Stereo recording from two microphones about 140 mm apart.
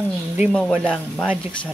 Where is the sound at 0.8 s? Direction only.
5° left (ahead or behind).